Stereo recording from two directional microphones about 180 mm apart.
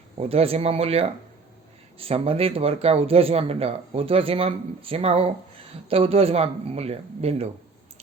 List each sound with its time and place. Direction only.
0.2 s speech: 35° right (ahead or behind)